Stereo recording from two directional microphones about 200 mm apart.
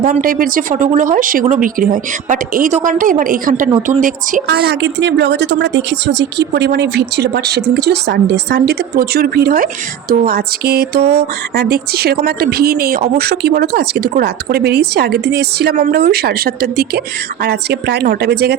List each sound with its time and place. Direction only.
0.0 s a woman's voice: 45° right (ahead or behind)
4.4 s speech: 55° right (ahead or behind)